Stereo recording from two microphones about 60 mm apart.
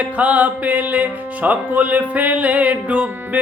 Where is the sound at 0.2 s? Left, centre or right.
Right.